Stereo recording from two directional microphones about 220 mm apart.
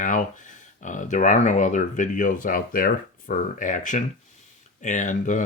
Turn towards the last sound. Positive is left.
turn(degrees=35)  # may be behind; listen again after turning